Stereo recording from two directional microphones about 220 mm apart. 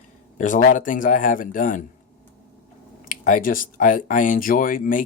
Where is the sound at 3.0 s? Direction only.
35° left (ahead or behind).